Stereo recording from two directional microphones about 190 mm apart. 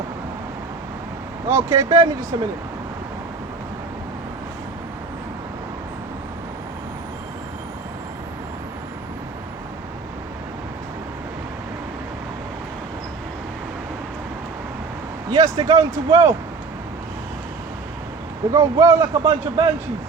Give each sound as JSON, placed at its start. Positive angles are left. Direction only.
{"t": 1.5, "sound": "a man's voice", "side_deg": -15}
{"t": 15.3, "sound": "a man's voice", "side_deg": -20}
{"t": 18.5, "sound": "a man's voice", "side_deg": -15}